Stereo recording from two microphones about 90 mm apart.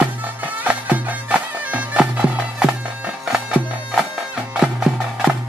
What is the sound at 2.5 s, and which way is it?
Bagpipes, 10° right (ahead or behind).